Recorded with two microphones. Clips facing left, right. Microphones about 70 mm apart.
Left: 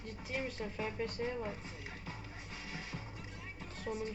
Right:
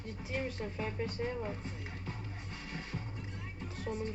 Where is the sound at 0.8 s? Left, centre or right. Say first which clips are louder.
Right 1 dB; centre.